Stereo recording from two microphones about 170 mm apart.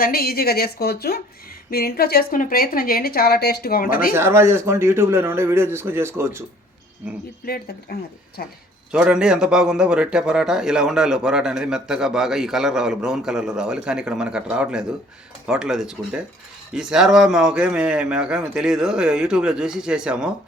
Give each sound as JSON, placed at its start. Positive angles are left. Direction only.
{"t": 0.0, "sound": "a woman's voice", "side_deg": 60}
{"t": 4.1, "sound": "speech", "side_deg": -15}
{"t": 7.4, "sound": "a woman's voice", "side_deg": 65}
{"t": 8.9, "sound": "a man's voice", "side_deg": -5}